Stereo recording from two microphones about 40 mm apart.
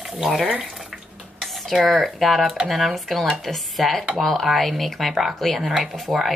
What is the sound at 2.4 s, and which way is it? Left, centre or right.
Speech, centre.